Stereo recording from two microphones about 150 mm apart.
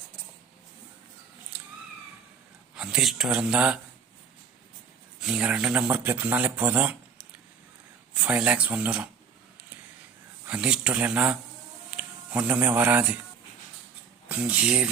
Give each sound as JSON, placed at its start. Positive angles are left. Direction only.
{"t": 2.7, "sound": "speech", "side_deg": -5}
{"t": 5.2, "sound": "a man's voice", "side_deg": -5}
{"t": 10.4, "sound": "a man's voice", "side_deg": -5}
{"t": 14.3, "sound": "speech", "side_deg": -10}